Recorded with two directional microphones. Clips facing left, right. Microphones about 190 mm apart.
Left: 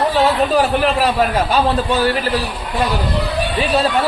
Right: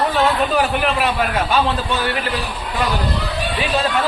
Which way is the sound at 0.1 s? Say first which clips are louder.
Left 3 dB; 35° left (ahead or behind).